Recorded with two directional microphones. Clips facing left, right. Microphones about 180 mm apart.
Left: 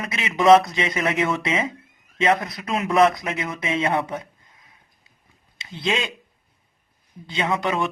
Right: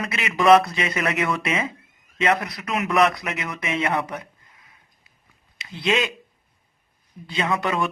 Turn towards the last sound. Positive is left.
turn(degrees=20)  # may be behind; listen again after turning